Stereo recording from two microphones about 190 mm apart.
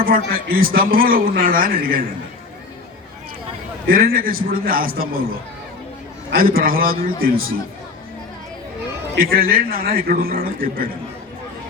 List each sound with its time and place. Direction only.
0.0 s a man's voice: 50° right (ahead or behind)
3.8 s a man's voice: 50° right (ahead or behind)
6.3 s a man's voice: 50° right (ahead or behind)
9.1 s a man's voice: 50° right (ahead or behind)